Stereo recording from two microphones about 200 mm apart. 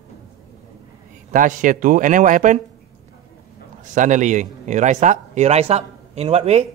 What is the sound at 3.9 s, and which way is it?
Speech, 40° right (ahead or behind).